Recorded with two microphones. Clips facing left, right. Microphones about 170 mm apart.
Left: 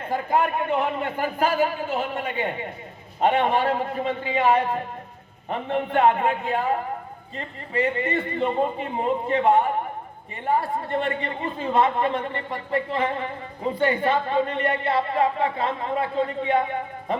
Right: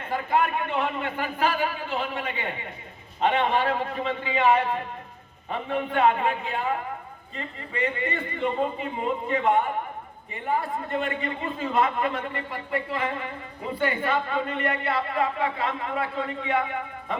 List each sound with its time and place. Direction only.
0.1 s a man's voice: 40° left (ahead or behind)